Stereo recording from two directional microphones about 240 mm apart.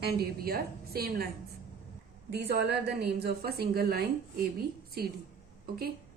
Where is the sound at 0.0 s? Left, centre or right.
Right.